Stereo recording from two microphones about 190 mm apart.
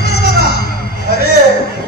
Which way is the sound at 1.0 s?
60° left (ahead or behind).